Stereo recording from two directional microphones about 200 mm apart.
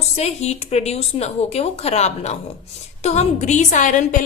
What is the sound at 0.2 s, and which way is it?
A woman's voice, 30° left (ahead or behind).